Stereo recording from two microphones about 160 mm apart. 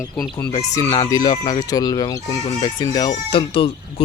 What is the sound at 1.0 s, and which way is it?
Speech, 20° left (ahead or behind).